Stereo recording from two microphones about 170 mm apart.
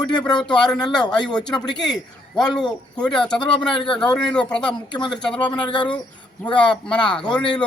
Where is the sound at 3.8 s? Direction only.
30° left (ahead or behind).